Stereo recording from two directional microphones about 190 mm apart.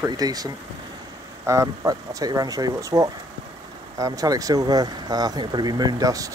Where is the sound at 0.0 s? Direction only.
20° right (ahead or behind).